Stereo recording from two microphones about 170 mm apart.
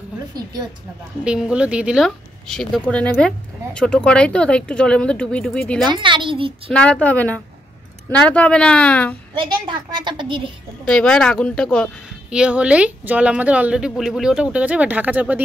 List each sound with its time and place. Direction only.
0.3 s a woman's voice: 25° right (ahead or behind)
1.2 s speech: 5° right (ahead or behind)
5.9 s a woman's voice: 30° right (ahead or behind)
6.7 s a woman's voice: 5° left (ahead or behind)
9.4 s a woman's voice: 25° right (ahead or behind)
10.9 s a woman's voice: 5° left (ahead or behind)
12.4 s speech: 5° right (ahead or behind)